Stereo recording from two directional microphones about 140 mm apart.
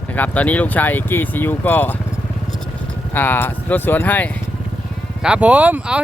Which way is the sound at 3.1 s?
15° left (ahead or behind).